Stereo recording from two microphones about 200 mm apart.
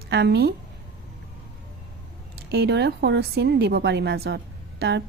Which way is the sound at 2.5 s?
55° right (ahead or behind).